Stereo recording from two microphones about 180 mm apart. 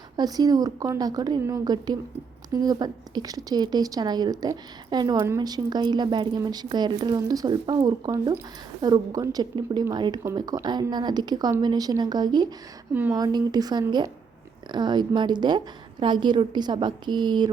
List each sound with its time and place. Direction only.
0.2 s a woman's voice: 20° right (ahead or behind)
12.9 s speech: 10° right (ahead or behind)
13.1 s a woman's voice: 20° right (ahead or behind)